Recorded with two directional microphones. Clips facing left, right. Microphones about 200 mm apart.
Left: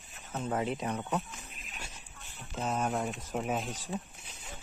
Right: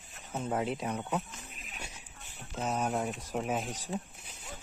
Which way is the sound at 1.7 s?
15° right (ahead or behind).